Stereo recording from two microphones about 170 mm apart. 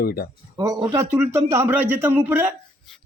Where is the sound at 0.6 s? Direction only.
25° right (ahead or behind).